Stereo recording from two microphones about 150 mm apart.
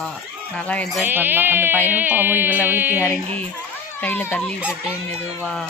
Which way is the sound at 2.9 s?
15° left (ahead or behind).